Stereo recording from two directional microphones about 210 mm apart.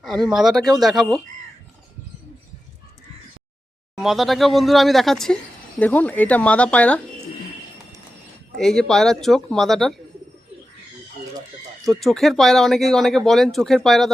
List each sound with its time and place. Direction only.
0.0 s speech: centre (ahead or behind)
4.0 s speech: centre (ahead or behind)
8.5 s speech: centre (ahead or behind)
11.9 s speech: centre (ahead or behind)